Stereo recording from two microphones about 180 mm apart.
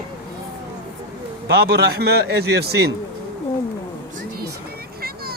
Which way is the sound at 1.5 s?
60° right (ahead or behind).